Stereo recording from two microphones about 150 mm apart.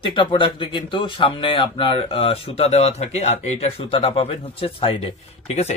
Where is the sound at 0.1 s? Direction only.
30° left (ahead or behind).